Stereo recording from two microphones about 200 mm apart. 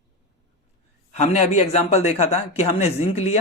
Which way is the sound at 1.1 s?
35° left (ahead or behind).